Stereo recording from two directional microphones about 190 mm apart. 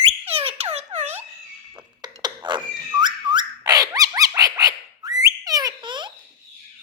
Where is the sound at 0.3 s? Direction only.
30° right (ahead or behind).